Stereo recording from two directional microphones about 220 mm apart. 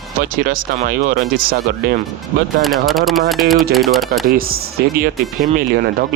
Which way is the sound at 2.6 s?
Centre (ahead or behind).